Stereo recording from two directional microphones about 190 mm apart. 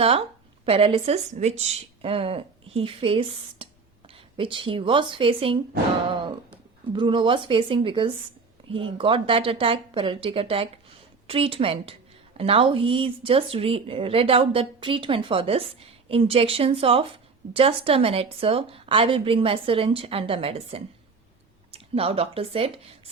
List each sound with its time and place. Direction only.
0.0 s speech: 30° right (ahead or behind)
6.1 s thunk: 25° right (ahead or behind)
6.9 s speech: 25° right (ahead or behind)